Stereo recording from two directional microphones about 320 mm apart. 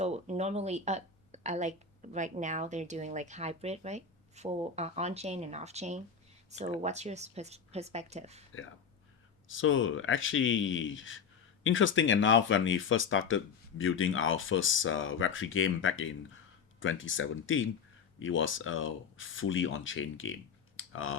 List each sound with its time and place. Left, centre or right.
0.0 s speech: right
9.5 s speech: left